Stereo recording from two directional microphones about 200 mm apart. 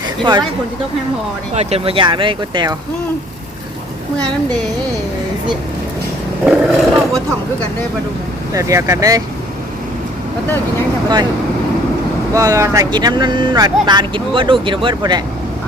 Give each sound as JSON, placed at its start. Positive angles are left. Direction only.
{"t": 0.2, "sound": "speech", "side_deg": -25}
{"t": 1.5, "sound": "speech", "side_deg": -30}
{"t": 6.4, "sound": "speech", "side_deg": -5}
{"t": 8.5, "sound": "speech", "side_deg": -15}
{"t": 12.3, "sound": "speech", "side_deg": -15}